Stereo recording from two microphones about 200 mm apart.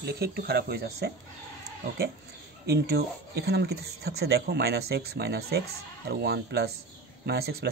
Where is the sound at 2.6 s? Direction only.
55° right (ahead or behind).